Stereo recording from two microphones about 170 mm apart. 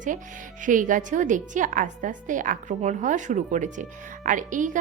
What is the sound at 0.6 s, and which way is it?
A woman's voice, 50° right (ahead or behind).